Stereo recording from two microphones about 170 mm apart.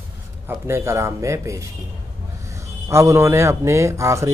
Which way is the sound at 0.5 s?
15° right (ahead or behind).